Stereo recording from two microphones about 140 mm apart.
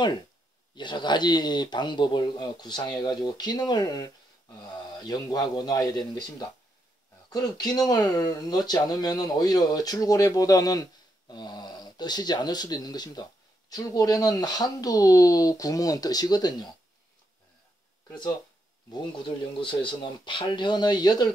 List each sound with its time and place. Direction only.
0.7 s speech: 35° left (ahead or behind)
7.3 s speech: 30° left (ahead or behind)
18.9 s speech: 35° left (ahead or behind)